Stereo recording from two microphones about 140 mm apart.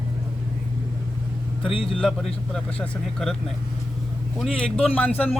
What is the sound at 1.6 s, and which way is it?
Speech, 40° left (ahead or behind).